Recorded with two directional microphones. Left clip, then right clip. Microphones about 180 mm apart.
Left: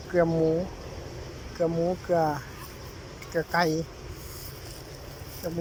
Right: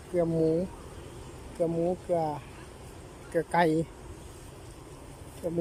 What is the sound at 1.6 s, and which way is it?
Speech, 10° right (ahead or behind).